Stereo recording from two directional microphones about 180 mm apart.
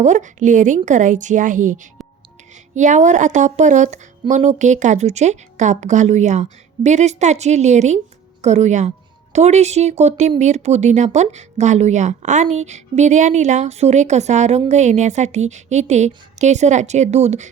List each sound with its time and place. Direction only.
0.0 s speech: 45° right (ahead or behind)